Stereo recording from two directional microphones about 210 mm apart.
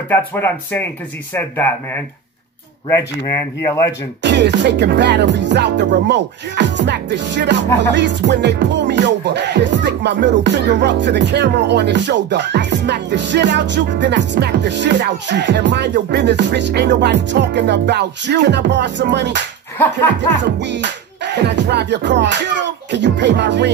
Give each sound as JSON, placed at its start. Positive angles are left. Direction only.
{"t": 0.1, "sound": "speech", "side_deg": 10}
{"t": 4.2, "sound": "music", "side_deg": -55}